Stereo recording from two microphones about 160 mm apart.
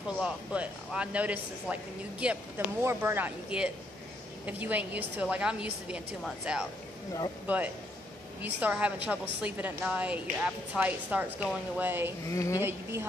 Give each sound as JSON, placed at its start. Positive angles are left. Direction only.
{"t": 0.2, "sound": "a man's voice", "side_deg": -5}
{"t": 12.3, "sound": "a woman's voice", "side_deg": 20}